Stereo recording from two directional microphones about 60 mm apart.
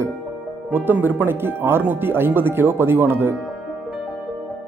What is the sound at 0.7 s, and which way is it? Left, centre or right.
Speech, right.